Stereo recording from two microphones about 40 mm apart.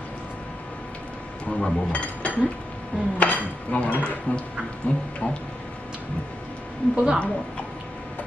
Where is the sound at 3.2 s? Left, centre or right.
Left.